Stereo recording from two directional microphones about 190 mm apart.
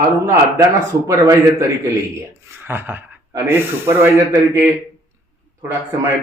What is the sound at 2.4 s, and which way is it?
Speech, 10° right (ahead or behind).